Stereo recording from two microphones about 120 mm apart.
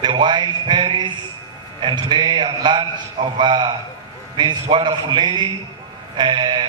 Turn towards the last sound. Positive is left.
turn(degrees=-40)  # may be behind; listen again after turning